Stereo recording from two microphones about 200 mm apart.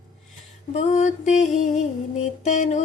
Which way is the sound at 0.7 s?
35° left (ahead or behind).